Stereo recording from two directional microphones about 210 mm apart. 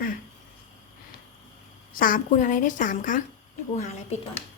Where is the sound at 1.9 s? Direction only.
40° left (ahead or behind).